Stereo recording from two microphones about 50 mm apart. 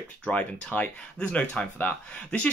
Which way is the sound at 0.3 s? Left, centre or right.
Left.